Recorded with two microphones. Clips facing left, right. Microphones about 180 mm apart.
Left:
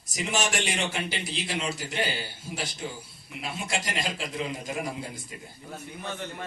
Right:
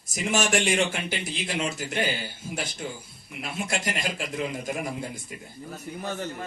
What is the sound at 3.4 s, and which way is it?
A man's voice, 50° right (ahead or behind).